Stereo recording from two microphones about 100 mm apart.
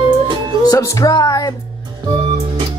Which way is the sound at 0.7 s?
35° left (ahead or behind).